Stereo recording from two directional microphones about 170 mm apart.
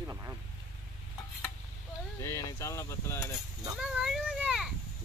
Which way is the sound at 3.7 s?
5° right (ahead or behind).